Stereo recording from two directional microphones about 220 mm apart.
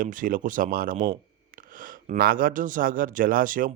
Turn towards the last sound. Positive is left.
turn(degrees=-40)  # may be behind; listen again after turning